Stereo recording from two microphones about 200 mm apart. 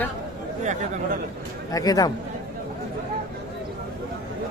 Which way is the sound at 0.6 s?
35° right (ahead or behind).